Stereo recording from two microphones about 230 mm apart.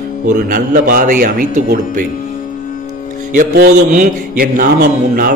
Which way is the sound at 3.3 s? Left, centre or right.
Right.